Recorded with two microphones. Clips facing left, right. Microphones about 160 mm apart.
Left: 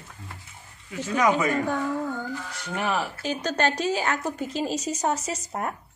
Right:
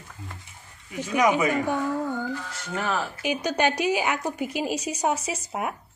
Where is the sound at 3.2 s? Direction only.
15° right (ahead or behind).